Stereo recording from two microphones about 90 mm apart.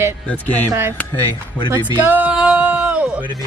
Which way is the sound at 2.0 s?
20° right (ahead or behind).